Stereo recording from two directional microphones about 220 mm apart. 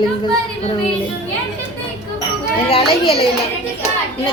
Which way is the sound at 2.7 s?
25° left (ahead or behind).